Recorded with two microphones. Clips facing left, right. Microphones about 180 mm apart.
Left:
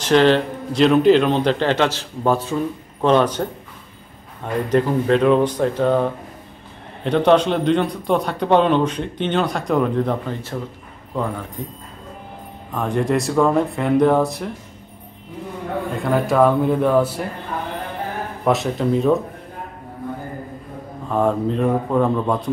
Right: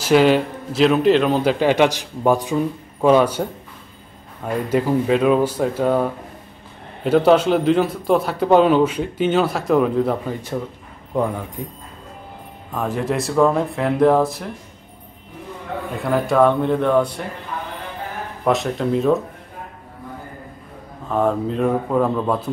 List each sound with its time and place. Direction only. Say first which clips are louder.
0.0 s a man's voice: even; 10° right (ahead or behind)
4.6 s a man's voice: left 1 dB; 10° right (ahead or behind)
7.1 s a man's voice: right 1 dB; 5° right (ahead or behind)
11.1 s a man's voice: right 4 dB; 20° right (ahead or behind)
12.7 s a man's voice: left 2 dB; 5° right (ahead or behind)
15.9 s a man's voice: even; centre (ahead or behind)
18.4 s a man's voice: even; centre (ahead or behind)
21.1 s a man's voice: left 1 dB; centre (ahead or behind)